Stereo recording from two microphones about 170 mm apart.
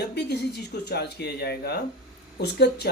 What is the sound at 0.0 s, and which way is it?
Speech, 75° left (ahead or behind).